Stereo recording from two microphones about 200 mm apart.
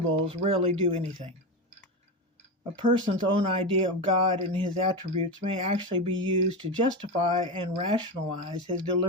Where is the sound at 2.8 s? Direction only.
40° right (ahead or behind).